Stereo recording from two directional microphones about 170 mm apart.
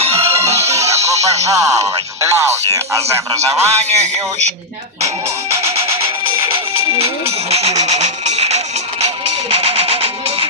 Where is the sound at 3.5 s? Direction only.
40° right (ahead or behind).